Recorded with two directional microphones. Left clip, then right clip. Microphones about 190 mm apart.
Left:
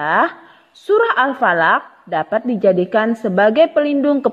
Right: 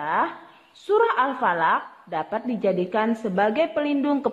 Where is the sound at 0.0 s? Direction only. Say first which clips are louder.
Left 8 dB; 30° left (ahead or behind).